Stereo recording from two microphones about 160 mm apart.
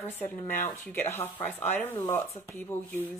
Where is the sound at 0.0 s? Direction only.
15° left (ahead or behind).